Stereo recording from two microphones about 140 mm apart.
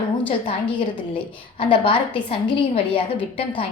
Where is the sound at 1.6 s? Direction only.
35° left (ahead or behind).